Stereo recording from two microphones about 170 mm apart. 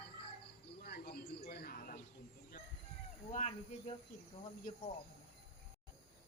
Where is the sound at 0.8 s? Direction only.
65° left (ahead or behind).